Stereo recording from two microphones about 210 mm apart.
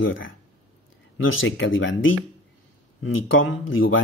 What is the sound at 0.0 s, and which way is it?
Speech, 65° left (ahead or behind).